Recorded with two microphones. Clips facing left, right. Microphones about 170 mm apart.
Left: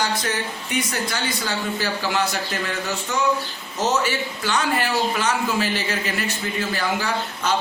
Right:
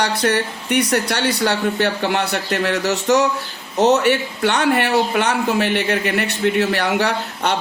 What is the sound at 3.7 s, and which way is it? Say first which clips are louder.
A man's voice: right 8 dB; 65° right (ahead or behind).